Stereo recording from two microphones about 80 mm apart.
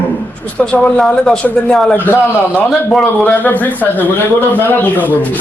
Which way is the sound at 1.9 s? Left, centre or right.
Left.